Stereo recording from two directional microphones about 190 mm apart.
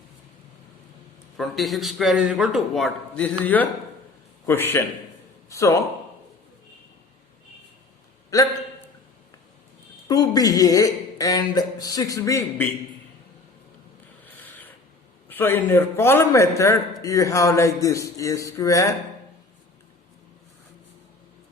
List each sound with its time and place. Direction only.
1.4 s a man's voice: centre (ahead or behind); by 5.7 s 15° left (ahead or behind)
8.3 s a man's voice: 20° left (ahead or behind)
10.1 s speech: 20° left (ahead or behind)
15.3 s a man's voice: 10° left (ahead or behind)